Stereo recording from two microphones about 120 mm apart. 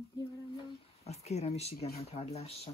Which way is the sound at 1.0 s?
60° left (ahead or behind).